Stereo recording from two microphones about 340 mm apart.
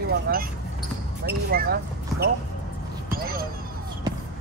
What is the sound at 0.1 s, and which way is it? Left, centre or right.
Speech, right.